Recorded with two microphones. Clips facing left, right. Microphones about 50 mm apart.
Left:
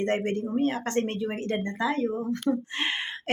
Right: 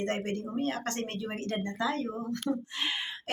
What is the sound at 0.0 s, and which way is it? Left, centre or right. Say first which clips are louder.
Speech: left 6 dB; left.